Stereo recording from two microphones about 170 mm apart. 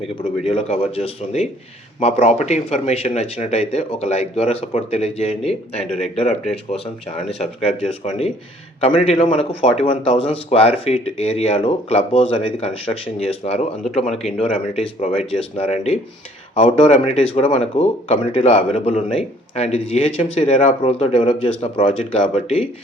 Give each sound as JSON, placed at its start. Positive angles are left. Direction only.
{"t": 0.2, "sound": "speech", "side_deg": 35}